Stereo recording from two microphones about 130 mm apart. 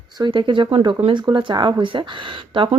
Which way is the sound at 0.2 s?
40° right (ahead or behind).